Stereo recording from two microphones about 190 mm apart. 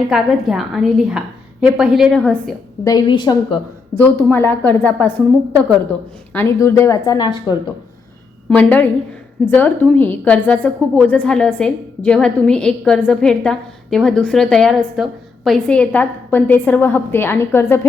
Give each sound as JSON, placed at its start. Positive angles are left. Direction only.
{"t": 0.1, "sound": "a woman's voice", "side_deg": 0}
{"t": 2.8, "sound": "a woman's voice", "side_deg": 20}
{"t": 3.9, "sound": "a woman's voice", "side_deg": 10}
{"t": 6.3, "sound": "a woman's voice", "side_deg": 15}
{"t": 8.4, "sound": "a woman's voice", "side_deg": 5}